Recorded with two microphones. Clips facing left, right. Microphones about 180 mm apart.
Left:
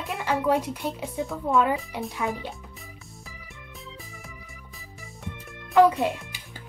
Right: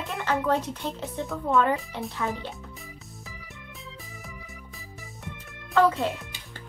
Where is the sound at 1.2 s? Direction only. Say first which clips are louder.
Even; centre (ahead or behind); by 2.5 s 15° left (ahead or behind).